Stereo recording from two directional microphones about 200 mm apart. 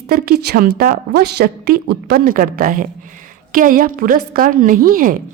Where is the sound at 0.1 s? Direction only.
50° right (ahead or behind).